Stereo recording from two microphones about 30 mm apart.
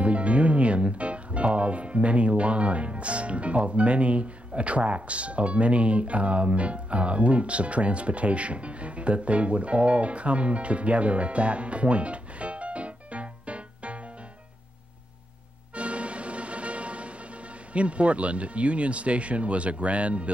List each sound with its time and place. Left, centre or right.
0.0 s speech: right
15.7 s music: right
17.7 s speech: right